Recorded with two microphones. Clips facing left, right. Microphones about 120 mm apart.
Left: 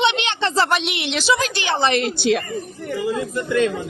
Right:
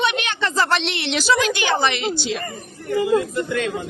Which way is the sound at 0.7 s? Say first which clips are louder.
Even; 5° left (ahead or behind).